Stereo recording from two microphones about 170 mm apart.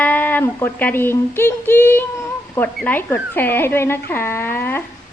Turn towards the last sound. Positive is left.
turn(degrees=15)  # may be behind; listen again after turning